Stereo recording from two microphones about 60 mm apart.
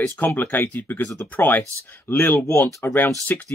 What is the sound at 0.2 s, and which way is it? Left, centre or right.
Speech, left.